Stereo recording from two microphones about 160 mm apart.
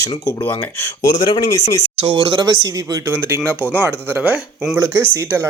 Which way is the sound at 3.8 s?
10° right (ahead or behind).